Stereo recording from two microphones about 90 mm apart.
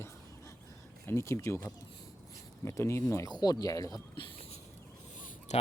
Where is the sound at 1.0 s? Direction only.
30° left (ahead or behind).